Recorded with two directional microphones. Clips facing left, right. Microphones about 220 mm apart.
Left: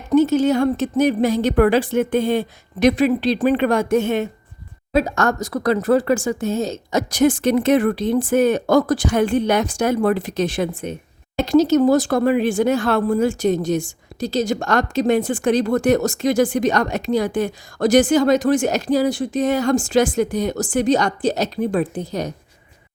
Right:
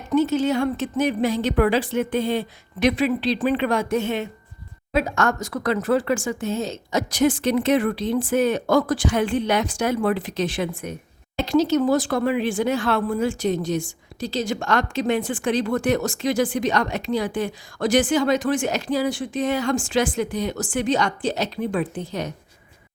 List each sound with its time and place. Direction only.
0.1 s speech: 40° left (ahead or behind)
11.3 s speech: 45° left (ahead or behind)